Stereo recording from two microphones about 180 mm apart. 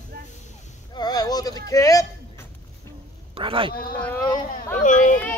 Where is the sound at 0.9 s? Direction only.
20° left (ahead or behind).